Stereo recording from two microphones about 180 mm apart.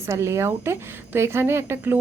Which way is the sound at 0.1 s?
15° right (ahead or behind).